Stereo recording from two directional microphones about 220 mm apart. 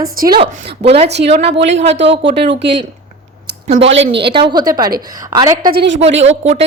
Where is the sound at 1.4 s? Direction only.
55° right (ahead or behind).